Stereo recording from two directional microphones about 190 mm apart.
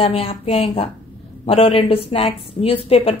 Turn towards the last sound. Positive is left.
turn(degrees=30)  # may be behind; listen again after turning